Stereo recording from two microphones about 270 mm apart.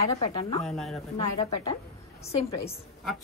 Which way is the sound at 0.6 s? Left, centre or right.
Centre.